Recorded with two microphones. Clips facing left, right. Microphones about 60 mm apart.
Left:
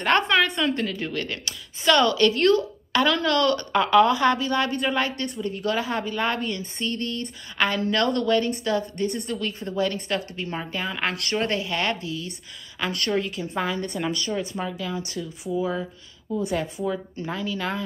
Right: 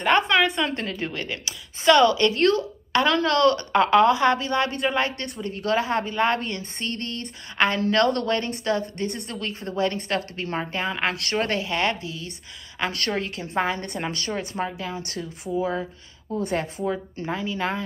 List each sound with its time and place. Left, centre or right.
0.0 s a woman's voice: centre
0.6 s a woman's voice: right
5.1 s a woman's voice: right
7.5 s a woman's voice: right
11.4 s a woman's voice: right
14.1 s a woman's voice: right
14.6 s a woman's voice: right
15.0 s a woman's voice: right
15.6 s a woman's voice: right
16.4 s a woman's voice: right
16.8 s a woman's voice: right